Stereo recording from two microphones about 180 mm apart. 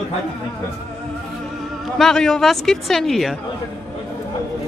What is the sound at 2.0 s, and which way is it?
Speech, 5° left (ahead or behind).